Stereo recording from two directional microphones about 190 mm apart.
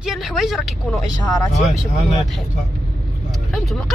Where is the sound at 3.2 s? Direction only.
Centre (ahead or behind).